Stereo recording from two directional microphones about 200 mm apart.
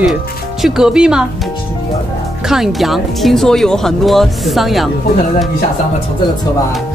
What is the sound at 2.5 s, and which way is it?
Speech, centre (ahead or behind).